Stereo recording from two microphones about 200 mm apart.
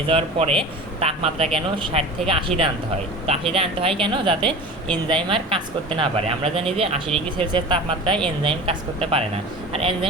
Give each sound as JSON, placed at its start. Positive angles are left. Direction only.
{"t": 0.1, "sound": "speech", "side_deg": -30}